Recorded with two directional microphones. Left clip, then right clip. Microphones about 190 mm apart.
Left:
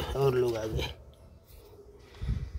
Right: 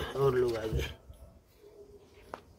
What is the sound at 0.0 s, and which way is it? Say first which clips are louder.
Speech: left 1 dB; 20° left (ahead or behind).